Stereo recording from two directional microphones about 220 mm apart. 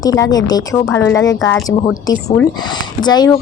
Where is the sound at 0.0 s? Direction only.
15° left (ahead or behind).